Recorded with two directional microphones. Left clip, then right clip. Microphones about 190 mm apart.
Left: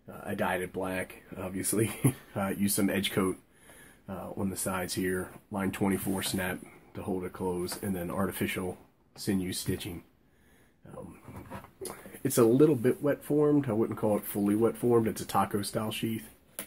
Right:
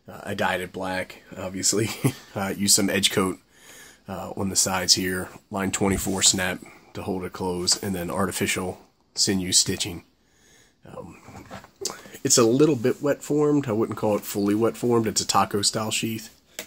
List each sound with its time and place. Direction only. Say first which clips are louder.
0.2 s speech: right 6 dB; 35° right (ahead or behind)
11.8 s speech: right 7 dB; 40° right (ahead or behind)